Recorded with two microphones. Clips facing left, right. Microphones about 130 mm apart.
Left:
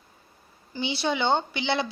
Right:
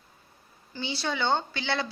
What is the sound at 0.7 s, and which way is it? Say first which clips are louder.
Speech: left 4 dB; 15° left (ahead or behind).